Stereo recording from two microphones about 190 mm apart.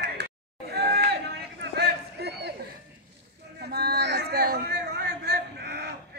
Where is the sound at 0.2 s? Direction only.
55° right (ahead or behind).